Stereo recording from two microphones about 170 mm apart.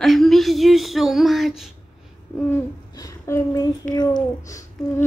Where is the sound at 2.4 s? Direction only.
15° left (ahead or behind).